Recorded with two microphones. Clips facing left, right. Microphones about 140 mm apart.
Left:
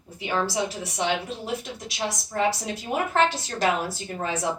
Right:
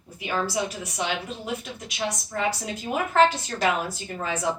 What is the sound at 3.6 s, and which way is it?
Speech, 30° left (ahead or behind).